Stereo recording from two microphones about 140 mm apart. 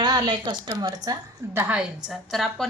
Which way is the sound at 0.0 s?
30° right (ahead or behind).